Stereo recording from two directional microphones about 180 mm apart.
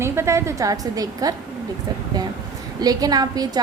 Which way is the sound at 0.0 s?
15° right (ahead or behind).